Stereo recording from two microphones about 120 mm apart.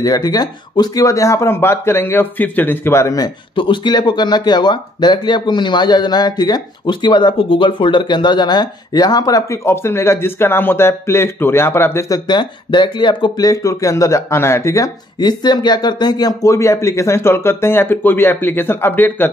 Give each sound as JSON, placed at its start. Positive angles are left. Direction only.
{"t": 0.0, "sound": "speech", "side_deg": 30}
{"t": 3.5, "sound": "speech", "side_deg": 40}
{"t": 12.3, "sound": "speech", "side_deg": 40}